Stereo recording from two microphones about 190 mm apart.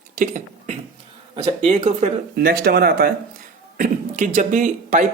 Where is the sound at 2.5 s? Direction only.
55° right (ahead or behind).